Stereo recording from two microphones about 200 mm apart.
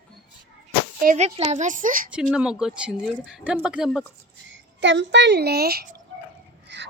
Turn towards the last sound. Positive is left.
turn(degrees=-55)  # may be behind; listen again after turning